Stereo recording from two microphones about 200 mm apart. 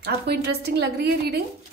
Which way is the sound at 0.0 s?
55° right (ahead or behind).